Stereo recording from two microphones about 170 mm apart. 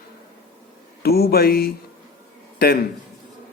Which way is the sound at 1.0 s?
65° left (ahead or behind).